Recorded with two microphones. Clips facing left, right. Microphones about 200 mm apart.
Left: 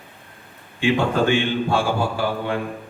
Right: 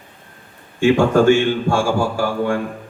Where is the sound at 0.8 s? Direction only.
45° right (ahead or behind).